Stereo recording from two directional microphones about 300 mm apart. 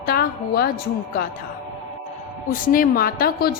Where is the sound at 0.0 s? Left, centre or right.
Left.